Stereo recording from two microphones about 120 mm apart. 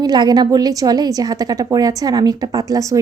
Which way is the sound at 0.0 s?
35° right (ahead or behind).